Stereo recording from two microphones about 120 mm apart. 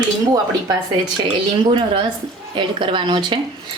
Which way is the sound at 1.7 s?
45° right (ahead or behind).